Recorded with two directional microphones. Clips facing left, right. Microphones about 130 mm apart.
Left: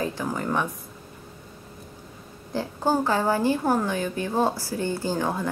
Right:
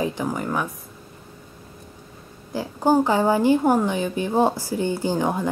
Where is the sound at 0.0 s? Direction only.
15° right (ahead or behind).